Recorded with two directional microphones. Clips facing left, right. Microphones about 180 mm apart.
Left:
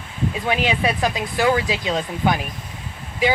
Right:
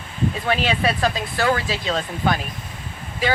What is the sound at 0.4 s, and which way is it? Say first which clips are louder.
Speech: left 1 dB; 15° left (ahead or behind).